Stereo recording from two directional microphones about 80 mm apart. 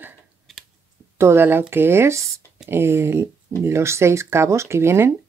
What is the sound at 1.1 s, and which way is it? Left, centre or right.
Speech, right.